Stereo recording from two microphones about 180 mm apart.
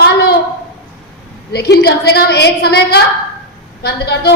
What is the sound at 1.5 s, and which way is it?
A woman's voice, 65° left (ahead or behind).